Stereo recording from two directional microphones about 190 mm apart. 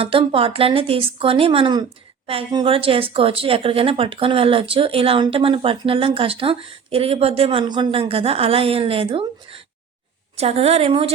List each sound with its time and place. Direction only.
0.0 s a woman's voice: 30° right (ahead or behind)